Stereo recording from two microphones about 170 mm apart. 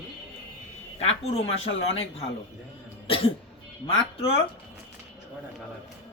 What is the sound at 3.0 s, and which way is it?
Cough, 35° left (ahead or behind).